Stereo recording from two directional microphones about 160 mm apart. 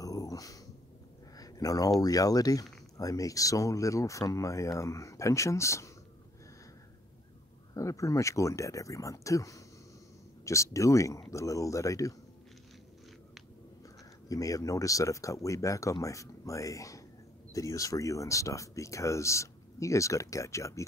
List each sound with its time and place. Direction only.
0.0 s a sound: 20° left (ahead or behind)
2.0 s speech: 20° left (ahead or behind)
7.7 s speech: 20° left (ahead or behind)
14.3 s speech: 20° left (ahead or behind)